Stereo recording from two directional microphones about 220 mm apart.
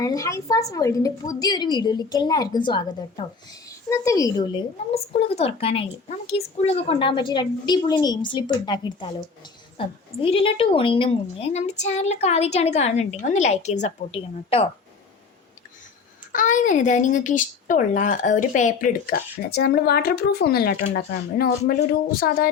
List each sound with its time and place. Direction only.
0.0 s a woman's voice: 15° left (ahead or behind)
16.3 s speech: 35° left (ahead or behind)